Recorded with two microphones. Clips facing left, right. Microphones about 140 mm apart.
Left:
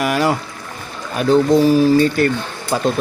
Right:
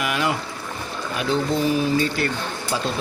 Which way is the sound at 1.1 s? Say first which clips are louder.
Left 10 dB; 45° left (ahead or behind).